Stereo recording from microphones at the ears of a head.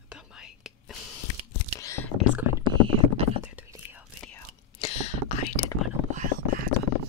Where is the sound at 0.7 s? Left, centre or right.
Left.